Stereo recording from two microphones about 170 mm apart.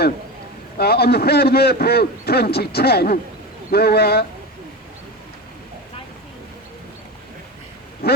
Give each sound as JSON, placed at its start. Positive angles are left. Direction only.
{"t": 0.8, "sound": "a man's voice", "side_deg": 70}